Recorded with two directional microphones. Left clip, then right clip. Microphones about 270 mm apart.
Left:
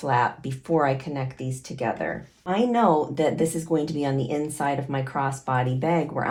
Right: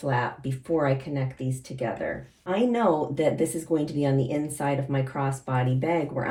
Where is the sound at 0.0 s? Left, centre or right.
Centre.